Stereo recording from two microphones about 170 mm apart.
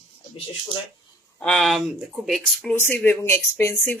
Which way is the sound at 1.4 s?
5° left (ahead or behind).